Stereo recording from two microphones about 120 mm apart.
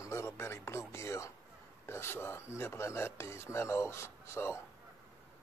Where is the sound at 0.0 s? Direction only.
25° left (ahead or behind).